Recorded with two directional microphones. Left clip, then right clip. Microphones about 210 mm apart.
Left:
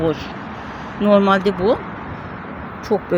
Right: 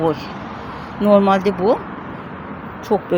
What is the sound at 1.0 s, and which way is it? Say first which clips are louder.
Speech: right 1 dB; centre (ahead or behind).